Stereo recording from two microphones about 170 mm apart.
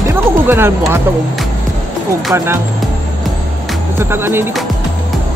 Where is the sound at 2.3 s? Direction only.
15° right (ahead or behind).